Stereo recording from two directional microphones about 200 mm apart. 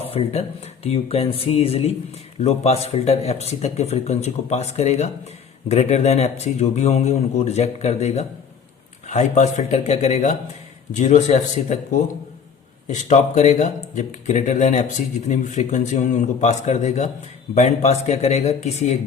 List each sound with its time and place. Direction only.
0.0 s speech: 30° left (ahead or behind)
12.9 s speech: 35° left (ahead or behind)